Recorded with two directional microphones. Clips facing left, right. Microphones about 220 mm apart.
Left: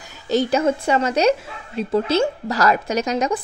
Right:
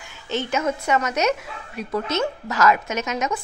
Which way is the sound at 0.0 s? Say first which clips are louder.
Left 7 dB; 35° left (ahead or behind).